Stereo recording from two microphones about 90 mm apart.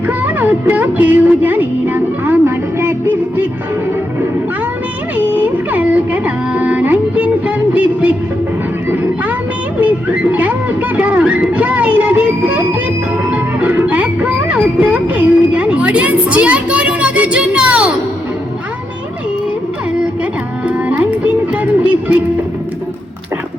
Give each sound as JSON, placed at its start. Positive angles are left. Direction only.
{"t": 0.1, "sound": "music", "side_deg": -20}
{"t": 5.1, "sound": "speech", "side_deg": -15}
{"t": 10.3, "sound": "music", "side_deg": -20}
{"t": 20.7, "sound": "music", "side_deg": -15}